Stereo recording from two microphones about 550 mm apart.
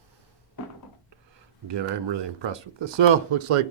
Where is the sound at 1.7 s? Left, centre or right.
Right.